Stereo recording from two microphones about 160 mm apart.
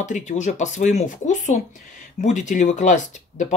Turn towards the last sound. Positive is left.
turn(degrees=50)  # may be behind; listen again after turning